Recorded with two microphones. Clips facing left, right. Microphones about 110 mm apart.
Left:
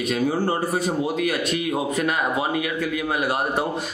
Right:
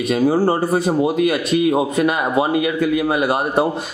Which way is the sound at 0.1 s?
30° right (ahead or behind).